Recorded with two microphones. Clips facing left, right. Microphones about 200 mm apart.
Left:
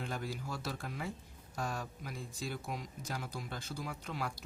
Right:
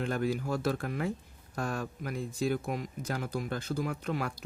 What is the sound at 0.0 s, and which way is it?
Speech, 55° right (ahead or behind).